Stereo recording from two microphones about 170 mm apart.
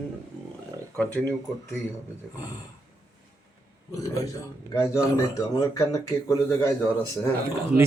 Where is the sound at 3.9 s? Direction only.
20° left (ahead or behind).